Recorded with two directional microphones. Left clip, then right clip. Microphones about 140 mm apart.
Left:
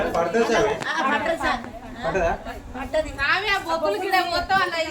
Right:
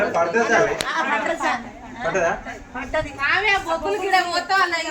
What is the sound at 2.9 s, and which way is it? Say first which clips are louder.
Speech: left 1 dB; 15° left (ahead or behind).